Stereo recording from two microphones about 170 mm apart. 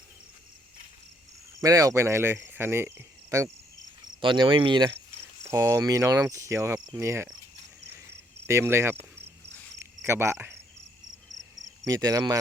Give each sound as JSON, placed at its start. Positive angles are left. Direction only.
{"t": 1.6, "sound": "speech", "side_deg": -20}
{"t": 4.2, "sound": "cricket", "side_deg": -30}
{"t": 5.4, "sound": "speech", "side_deg": -15}
{"t": 8.4, "sound": "speech", "side_deg": -15}
{"t": 10.1, "sound": "speech", "side_deg": -15}
{"t": 11.3, "sound": "cricket", "side_deg": -90}
{"t": 11.9, "sound": "cricket", "side_deg": -20}